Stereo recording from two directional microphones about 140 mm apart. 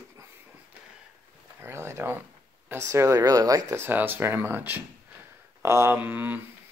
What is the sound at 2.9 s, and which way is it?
Speech, 25° right (ahead or behind).